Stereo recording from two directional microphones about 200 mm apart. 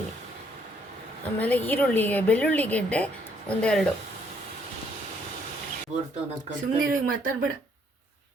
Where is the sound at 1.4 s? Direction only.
10° left (ahead or behind).